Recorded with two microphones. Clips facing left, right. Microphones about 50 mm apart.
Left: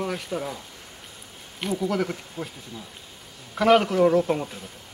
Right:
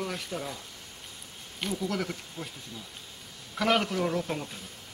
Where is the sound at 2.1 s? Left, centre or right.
Centre.